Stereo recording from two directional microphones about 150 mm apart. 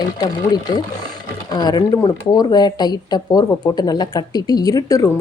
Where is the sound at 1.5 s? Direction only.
25° left (ahead or behind).